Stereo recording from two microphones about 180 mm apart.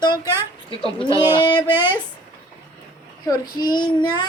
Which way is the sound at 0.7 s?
30° left (ahead or behind).